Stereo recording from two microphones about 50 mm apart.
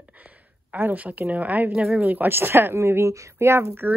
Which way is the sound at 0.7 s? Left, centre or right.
Right.